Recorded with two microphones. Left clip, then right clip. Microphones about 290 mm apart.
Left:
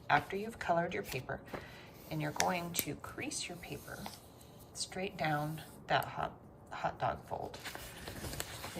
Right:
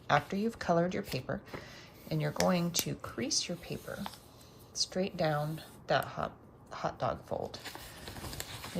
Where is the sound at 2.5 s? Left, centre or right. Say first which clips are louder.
Right 4 dB; centre.